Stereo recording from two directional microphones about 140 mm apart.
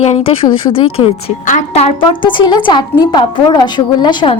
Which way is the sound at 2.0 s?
35° left (ahead or behind).